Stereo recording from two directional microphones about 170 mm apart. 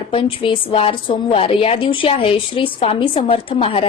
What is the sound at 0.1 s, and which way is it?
A woman's voice, 30° left (ahead or behind).